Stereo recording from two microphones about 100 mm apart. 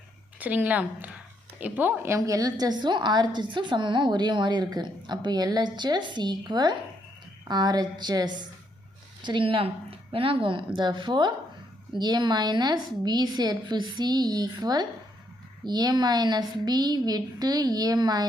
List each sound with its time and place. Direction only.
0.3 s a woman's voice: 15° right (ahead or behind); by 8.4 s 45° right (ahead or behind)
9.2 s a woman's voice: 55° right (ahead or behind)